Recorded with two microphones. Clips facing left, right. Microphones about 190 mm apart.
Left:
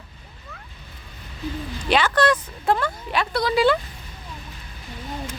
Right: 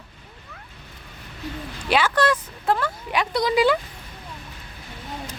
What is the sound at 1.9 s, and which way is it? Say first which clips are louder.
Speech: left 1 dB; 5° right (ahead or behind).